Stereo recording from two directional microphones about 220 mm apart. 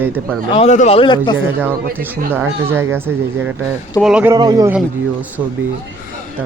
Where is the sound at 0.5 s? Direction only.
30° left (ahead or behind).